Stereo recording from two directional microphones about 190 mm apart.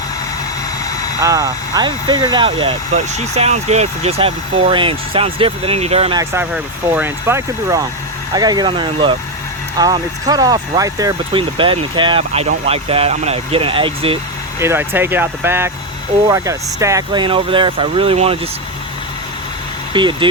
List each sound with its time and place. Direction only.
1.2 s speech: 15° right (ahead or behind); by 6.1 s 30° right (ahead or behind)
6.1 s speech: 10° right (ahead or behind); by 14.2 s 30° right (ahead or behind)
14.6 s speech: 10° right (ahead or behind); by 18.3 s 30° right (ahead or behind)
19.9 s speech: 25° right (ahead or behind)